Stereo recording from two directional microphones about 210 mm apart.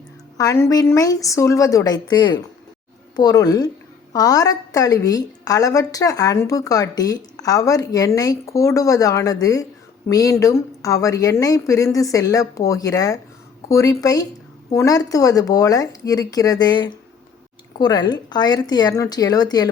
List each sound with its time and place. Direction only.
0.3 s a woman's voice: 15° left (ahead or behind)